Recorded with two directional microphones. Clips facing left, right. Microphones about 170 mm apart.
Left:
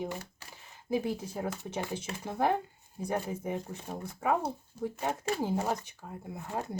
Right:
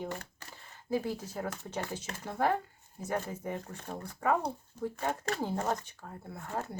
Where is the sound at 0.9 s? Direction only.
15° left (ahead or behind).